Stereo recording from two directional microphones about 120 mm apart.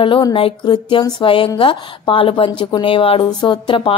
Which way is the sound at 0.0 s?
45° left (ahead or behind).